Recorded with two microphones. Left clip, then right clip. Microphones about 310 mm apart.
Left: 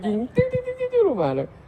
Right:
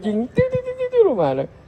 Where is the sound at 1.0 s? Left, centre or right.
Centre.